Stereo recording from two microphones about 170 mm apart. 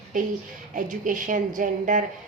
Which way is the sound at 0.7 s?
50° right (ahead or behind).